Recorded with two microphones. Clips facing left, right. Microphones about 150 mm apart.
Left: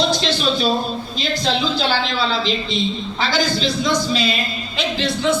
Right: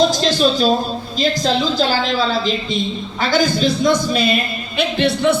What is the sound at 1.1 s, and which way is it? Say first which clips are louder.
A woman's voice: right 5 dB; 40° right (ahead or behind).